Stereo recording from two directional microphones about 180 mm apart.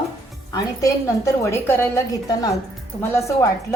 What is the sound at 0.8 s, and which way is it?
A woman's voice, 15° left (ahead or behind).